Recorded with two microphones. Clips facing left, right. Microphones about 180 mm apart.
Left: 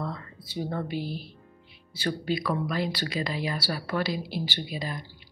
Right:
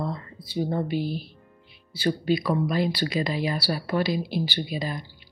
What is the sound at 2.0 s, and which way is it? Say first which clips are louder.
Speech: right 5 dB; 15° right (ahead or behind).